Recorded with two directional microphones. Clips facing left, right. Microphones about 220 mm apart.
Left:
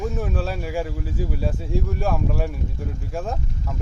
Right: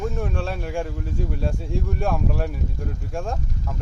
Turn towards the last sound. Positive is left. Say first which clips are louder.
# even
turn(degrees=0)  # may be behind; listen again after turning